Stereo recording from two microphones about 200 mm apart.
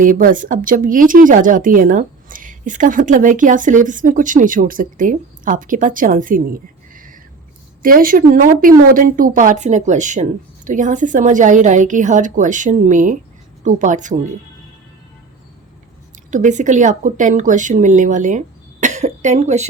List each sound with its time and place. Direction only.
0.0 s speech: 45° right (ahead or behind)
16.3 s speech: 40° right (ahead or behind)